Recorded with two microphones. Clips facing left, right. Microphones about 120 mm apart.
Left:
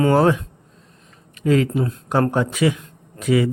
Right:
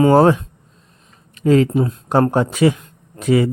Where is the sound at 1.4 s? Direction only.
30° right (ahead or behind).